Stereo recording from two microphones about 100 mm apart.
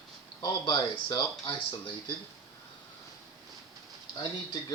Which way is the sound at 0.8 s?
40° left (ahead or behind).